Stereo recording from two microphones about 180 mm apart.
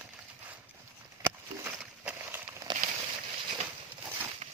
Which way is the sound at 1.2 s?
10° right (ahead or behind).